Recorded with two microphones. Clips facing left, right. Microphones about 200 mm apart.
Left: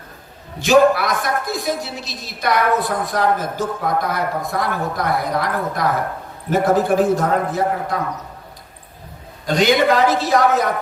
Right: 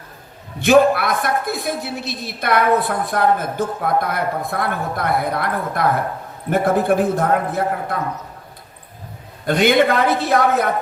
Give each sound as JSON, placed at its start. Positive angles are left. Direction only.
{"t": 0.6, "sound": "a man's voice", "side_deg": -55}
{"t": 9.5, "sound": "a man's voice", "side_deg": -55}